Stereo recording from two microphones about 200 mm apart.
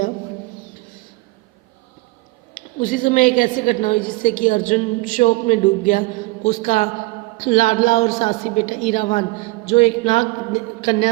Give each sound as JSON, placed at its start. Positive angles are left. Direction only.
{"t": 2.6, "sound": "a woman's voice", "side_deg": 45}